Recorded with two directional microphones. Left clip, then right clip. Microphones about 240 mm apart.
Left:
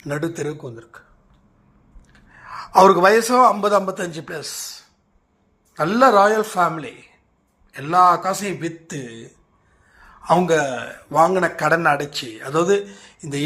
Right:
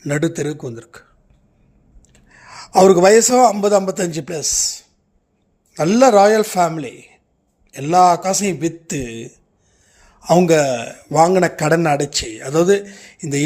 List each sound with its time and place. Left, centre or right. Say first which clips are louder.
0.0 s a man's voice: right 5 dB; right
2.1 s a man's voice: left 3 dB; right